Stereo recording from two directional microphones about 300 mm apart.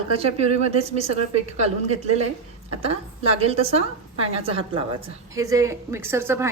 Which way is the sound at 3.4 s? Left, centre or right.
Centre.